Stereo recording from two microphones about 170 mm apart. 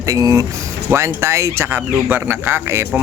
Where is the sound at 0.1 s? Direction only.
20° right (ahead or behind).